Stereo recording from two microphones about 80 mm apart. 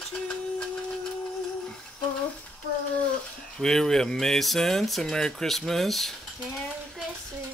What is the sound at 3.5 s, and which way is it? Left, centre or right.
Speech, centre.